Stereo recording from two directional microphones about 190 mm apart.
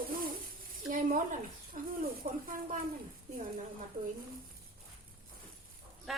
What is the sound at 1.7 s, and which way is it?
Speech, 40° right (ahead or behind).